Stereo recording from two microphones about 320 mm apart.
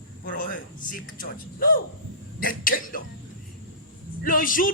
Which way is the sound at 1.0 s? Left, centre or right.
Left.